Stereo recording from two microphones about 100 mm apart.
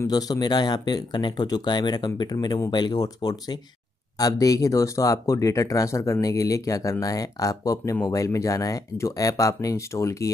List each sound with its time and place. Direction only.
0.0 s speech: 40° left (ahead or behind)